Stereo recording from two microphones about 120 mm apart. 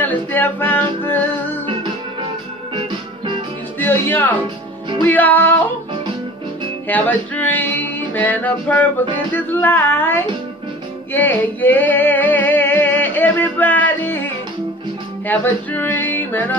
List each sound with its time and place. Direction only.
0.0 s music: 15° left (ahead or behind)
3.8 s music: 15° left (ahead or behind)
6.9 s music: 15° left (ahead or behind)